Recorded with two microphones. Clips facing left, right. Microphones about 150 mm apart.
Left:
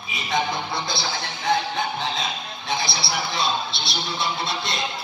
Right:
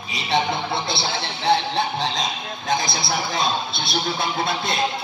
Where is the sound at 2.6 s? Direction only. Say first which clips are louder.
Right 4 dB; 45° right (ahead or behind).